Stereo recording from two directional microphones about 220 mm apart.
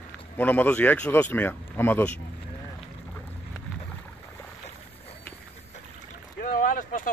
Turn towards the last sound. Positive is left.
turn(degrees=35)  # may be behind; listen again after turning